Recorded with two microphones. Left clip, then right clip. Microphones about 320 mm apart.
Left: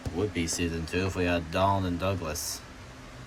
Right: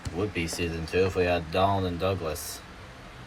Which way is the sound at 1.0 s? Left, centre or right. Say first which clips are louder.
Right 5 dB; left.